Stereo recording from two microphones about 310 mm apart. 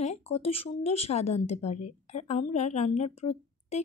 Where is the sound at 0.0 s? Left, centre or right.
Left.